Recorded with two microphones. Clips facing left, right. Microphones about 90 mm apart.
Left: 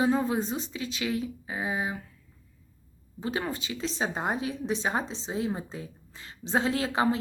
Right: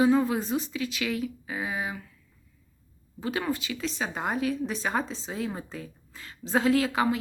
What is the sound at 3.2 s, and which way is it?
A woman's voice, 30° left (ahead or behind).